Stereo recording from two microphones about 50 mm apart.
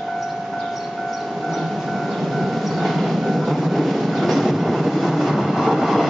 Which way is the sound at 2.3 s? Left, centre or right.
Centre.